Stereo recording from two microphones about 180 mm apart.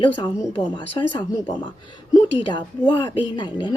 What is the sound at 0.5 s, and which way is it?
Speech, 25° left (ahead or behind).